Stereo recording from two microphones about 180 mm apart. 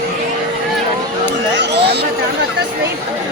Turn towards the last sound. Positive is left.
turn(degrees=-65)  # may be behind; listen again after turning